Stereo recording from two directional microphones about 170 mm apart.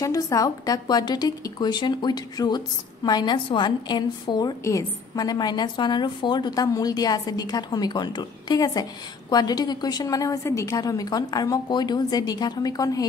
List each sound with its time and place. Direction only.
0.0 s a woman's voice: 20° left (ahead or behind)